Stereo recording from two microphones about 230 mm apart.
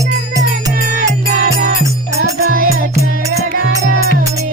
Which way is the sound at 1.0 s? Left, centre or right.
Right.